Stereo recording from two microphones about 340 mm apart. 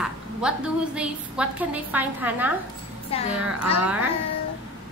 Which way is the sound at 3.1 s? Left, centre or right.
Centre.